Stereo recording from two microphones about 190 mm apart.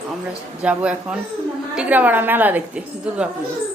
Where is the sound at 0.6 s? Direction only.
5° right (ahead or behind).